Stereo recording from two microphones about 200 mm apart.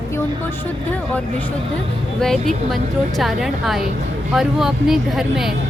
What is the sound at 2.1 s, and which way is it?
Speech, centre (ahead or behind).